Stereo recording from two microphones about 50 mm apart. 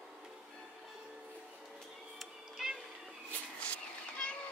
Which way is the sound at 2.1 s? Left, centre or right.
Centre.